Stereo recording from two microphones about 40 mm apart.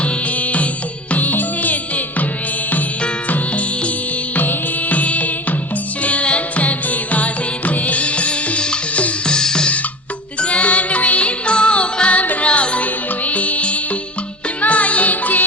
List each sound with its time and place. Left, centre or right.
0.0 s music: left
3.2 s music: left
9.2 s drum: centre
10.4 s music: left
12.2 s music: left
12.5 s music: left